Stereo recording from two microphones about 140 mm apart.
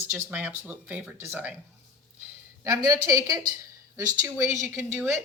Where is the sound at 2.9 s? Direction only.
25° right (ahead or behind).